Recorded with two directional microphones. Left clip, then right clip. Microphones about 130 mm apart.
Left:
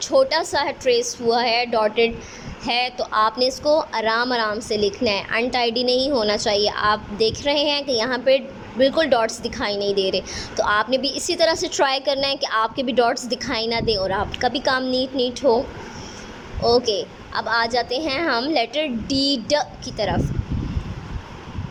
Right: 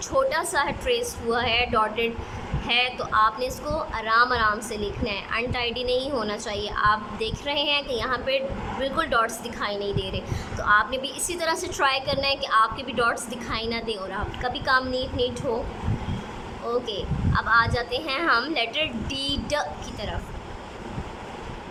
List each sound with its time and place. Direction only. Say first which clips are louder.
0.1 s a woman's voice: left 5 dB; 40° left (ahead or behind)
16.6 s a woman's voice: left 10 dB; 45° left (ahead or behind)